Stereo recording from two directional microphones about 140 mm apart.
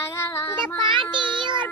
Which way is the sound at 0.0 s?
20° left (ahead or behind).